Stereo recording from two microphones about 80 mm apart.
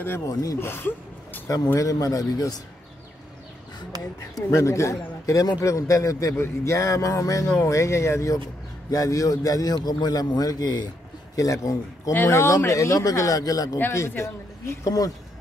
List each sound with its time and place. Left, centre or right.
0.3 s speech: left
0.6 s speech: left
1.8 s speech: left
4.4 s a man's voice: left
11.3 s speech: left
13.9 s speech: left